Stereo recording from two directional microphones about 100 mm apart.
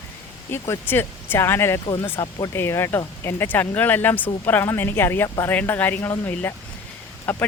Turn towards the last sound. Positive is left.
turn(degrees=15)  # may be behind; listen again after turning